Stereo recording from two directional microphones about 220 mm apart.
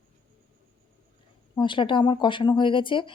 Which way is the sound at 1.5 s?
20° left (ahead or behind).